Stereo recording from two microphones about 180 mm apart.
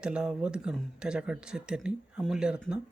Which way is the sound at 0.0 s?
5° right (ahead or behind).